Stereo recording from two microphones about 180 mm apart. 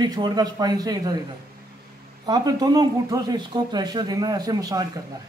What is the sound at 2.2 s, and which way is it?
Speech, 20° right (ahead or behind).